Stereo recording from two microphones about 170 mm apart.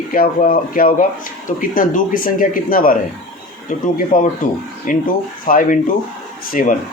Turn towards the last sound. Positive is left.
turn(degrees=55)  # may be behind; listen again after turning